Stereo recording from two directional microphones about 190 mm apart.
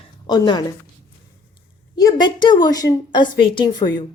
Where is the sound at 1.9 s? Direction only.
20° left (ahead or behind).